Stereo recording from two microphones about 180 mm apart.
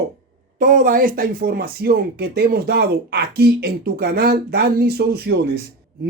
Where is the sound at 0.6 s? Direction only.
50° right (ahead or behind); by 6.1 s 65° right (ahead or behind).